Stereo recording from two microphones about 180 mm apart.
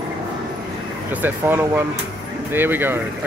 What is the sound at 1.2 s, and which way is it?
Speech, 10° right (ahead or behind).